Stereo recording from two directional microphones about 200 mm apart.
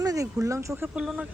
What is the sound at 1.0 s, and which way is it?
Speech, 5° right (ahead or behind).